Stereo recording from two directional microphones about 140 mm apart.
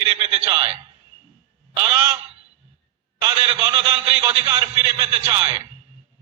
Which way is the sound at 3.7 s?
40° right (ahead or behind).